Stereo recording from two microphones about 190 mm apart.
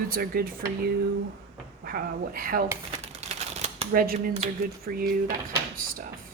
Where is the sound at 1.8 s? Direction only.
50° right (ahead or behind).